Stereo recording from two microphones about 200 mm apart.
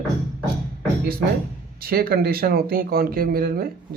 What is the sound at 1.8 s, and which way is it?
Speech, 50° right (ahead or behind).